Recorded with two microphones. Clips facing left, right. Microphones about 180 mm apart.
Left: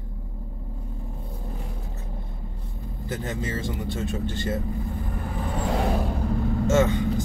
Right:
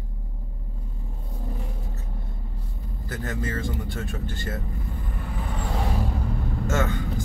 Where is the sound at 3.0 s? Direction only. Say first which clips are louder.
Left 1 dB; 20° left (ahead or behind).